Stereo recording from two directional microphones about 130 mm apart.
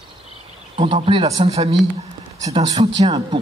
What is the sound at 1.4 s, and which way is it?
Speech, 50° right (ahead or behind).